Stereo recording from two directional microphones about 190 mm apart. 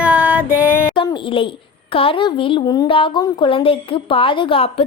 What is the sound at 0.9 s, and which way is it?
A woman's voice, 25° left (ahead or behind).